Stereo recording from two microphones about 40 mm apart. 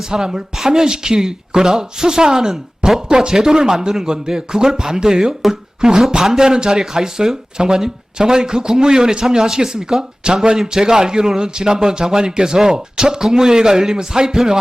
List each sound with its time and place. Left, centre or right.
0.1 s a man's voice: centre